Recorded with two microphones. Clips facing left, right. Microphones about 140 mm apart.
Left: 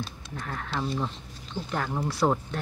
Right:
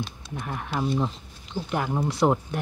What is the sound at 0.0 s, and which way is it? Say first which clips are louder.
Speech: right 3 dB; 15° right (ahead or behind).